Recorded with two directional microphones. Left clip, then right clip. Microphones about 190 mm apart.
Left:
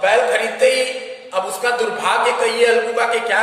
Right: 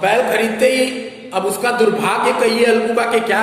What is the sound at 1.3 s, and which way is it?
A man's voice, 15° right (ahead or behind).